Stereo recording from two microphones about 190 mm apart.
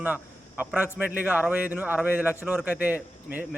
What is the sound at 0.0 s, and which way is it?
A man's voice, 10° right (ahead or behind).